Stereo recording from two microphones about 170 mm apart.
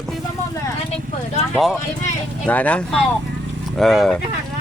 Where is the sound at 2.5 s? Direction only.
10° left (ahead or behind).